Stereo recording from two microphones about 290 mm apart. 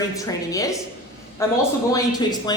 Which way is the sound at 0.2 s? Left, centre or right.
Centre.